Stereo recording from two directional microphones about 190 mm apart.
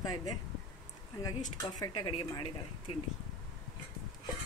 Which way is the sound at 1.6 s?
20° left (ahead or behind).